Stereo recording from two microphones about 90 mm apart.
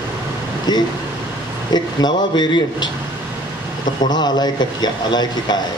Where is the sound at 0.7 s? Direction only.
50° left (ahead or behind).